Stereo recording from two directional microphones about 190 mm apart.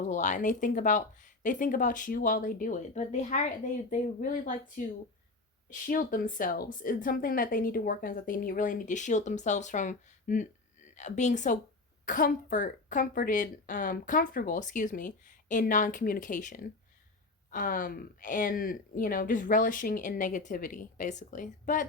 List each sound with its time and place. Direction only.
0.1 s a woman's voice: 40° left (ahead or behind)